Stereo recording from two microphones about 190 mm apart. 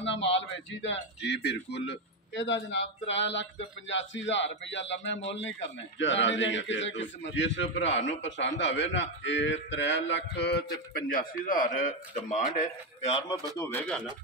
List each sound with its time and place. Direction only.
0.0 s a man's voice: 70° left (ahead or behind); by 13.4 s 30° left (ahead or behind)
13.6 s speech: 10° left (ahead or behind)